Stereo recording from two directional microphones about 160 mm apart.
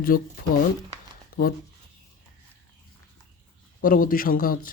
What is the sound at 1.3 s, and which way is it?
Speech, 65° left (ahead or behind).